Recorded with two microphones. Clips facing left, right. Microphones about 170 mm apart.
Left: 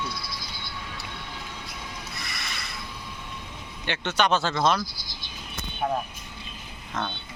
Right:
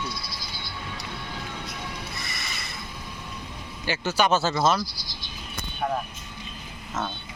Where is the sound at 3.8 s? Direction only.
5° right (ahead or behind).